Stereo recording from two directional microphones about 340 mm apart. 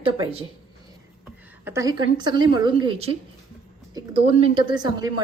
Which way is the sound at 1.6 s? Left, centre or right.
Centre.